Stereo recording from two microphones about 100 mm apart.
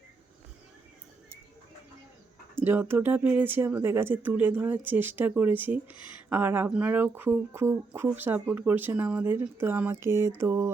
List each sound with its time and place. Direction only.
2.6 s speech: 20° right (ahead or behind)